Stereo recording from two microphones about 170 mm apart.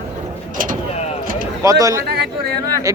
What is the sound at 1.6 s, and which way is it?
Speech, 20° right (ahead or behind).